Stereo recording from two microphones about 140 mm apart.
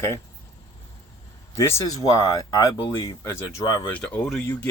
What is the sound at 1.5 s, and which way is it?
Speech, 20° left (ahead or behind).